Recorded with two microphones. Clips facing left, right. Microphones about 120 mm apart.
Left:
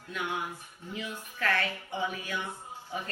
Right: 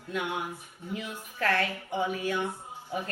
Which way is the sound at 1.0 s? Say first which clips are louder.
Right 1 dB; 40° right (ahead or behind).